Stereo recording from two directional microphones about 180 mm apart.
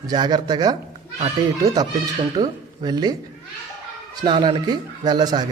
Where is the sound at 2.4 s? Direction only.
20° right (ahead or behind).